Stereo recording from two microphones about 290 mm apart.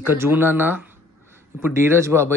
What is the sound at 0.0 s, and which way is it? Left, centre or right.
Speech, centre.